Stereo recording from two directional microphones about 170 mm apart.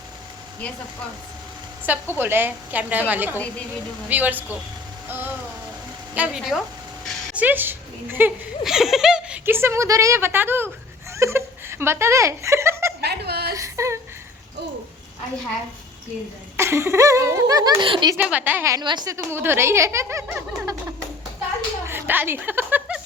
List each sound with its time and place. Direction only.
1.8 s a child's voice: 10° right (ahead or behind)
5.0 s rain on surface: 10° right (ahead or behind)
6.1 s speech: 5° right (ahead or behind)
11.2 s chuckle: 15° right (ahead or behind)
13.0 s a sound: 70° right (ahead or behind)
13.5 s whimper: 20° right (ahead or behind)
16.6 s a child's voice: 15° right (ahead or behind)
18.2 s a child's voice: 10° right (ahead or behind)
20.2 s speech: 5° right (ahead or behind)
21.8 s a sound: 10° right (ahead or behind)